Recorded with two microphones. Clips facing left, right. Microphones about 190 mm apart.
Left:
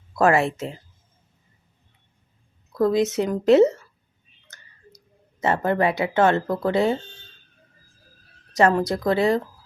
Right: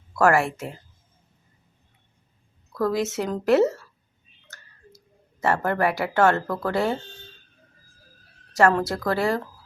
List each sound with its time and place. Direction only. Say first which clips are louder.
0.2 s speech: left 1 dB; 20° left (ahead or behind)
2.7 s speech: left 4 dB; 20° left (ahead or behind)
5.4 s speech: left 2 dB; 20° left (ahead or behind)
8.5 s speech: left 1 dB; 20° left (ahead or behind)